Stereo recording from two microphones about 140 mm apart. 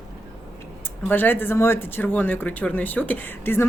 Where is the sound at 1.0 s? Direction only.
15° left (ahead or behind).